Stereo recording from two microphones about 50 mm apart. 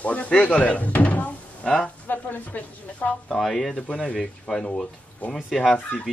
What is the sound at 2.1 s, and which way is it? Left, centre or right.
A woman's voice, left.